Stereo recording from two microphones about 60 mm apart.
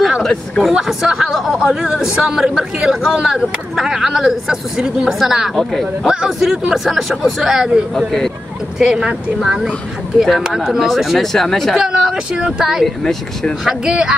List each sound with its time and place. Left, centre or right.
0.2 s speech: centre
0.7 s a man's voice: centre
5.6 s speech: centre
6.0 s a man's voice: centre
11.8 s a man's voice: centre
12.8 s speech: centre
13.7 s a man's voice: centre